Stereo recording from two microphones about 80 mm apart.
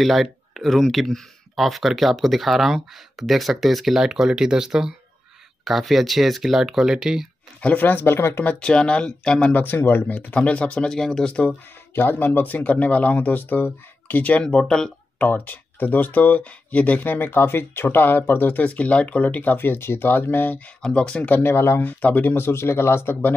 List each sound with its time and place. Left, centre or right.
0.0 s speech: centre
7.6 s speech: left
8.5 s speech: centre
9.5 s speech: left
11.9 s speech: left; by 14.9 s centre
15.1 s speech: left
21.4 s speech: left